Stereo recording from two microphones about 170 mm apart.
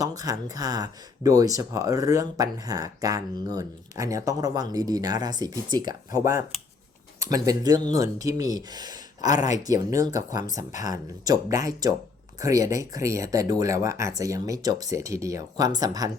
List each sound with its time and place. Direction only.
0.0 s speech: 20° right (ahead or behind)